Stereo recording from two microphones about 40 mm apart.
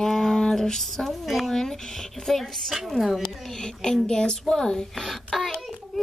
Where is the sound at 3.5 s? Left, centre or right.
Centre.